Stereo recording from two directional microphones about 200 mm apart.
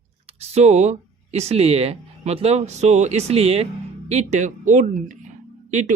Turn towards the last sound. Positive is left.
turn(degrees=-35)  # may be behind; listen again after turning